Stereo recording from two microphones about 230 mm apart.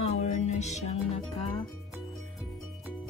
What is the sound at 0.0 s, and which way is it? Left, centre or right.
Music, left.